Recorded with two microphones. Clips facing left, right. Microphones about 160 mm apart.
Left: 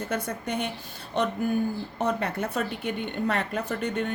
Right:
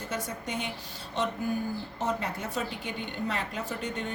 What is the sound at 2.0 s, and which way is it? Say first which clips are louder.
A woman's voice: left 5 dB; 65° left (ahead or behind).